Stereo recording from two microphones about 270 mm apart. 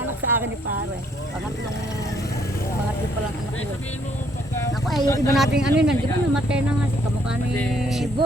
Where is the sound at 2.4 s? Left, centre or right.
Left.